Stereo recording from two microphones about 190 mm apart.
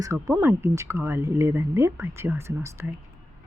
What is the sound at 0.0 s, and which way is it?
Speech, 20° right (ahead or behind).